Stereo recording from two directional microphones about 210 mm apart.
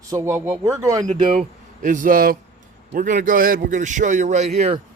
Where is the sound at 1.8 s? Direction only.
40° right (ahead or behind).